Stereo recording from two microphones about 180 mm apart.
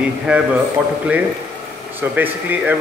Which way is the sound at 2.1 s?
10° right (ahead or behind).